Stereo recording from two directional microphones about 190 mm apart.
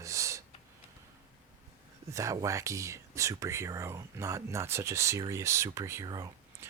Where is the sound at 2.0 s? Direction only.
15° right (ahead or behind).